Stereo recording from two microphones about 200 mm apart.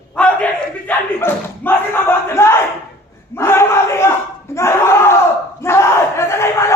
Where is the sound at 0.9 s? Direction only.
10° left (ahead or behind).